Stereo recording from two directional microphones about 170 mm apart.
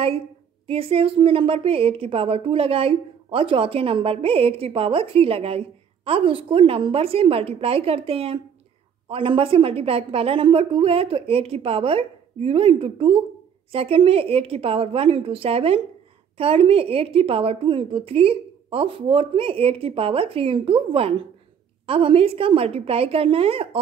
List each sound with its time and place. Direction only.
0.7 s a woman's voice: 35° right (ahead or behind)